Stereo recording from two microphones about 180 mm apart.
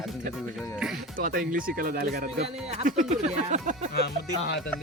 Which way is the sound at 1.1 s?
50° right (ahead or behind).